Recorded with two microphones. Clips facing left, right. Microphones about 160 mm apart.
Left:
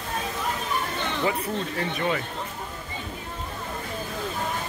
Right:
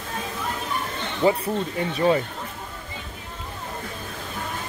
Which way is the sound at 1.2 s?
35° right (ahead or behind).